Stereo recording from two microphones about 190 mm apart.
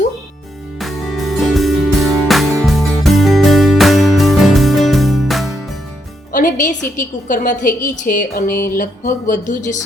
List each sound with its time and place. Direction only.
0.8 s music: centre (ahead or behind)
6.3 s a woman's voice: 45° left (ahead or behind)